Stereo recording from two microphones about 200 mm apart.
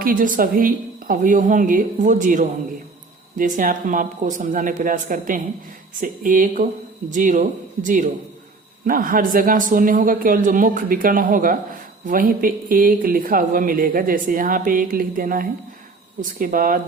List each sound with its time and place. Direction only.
0.0 s a woman's voice: 45° right (ahead or behind)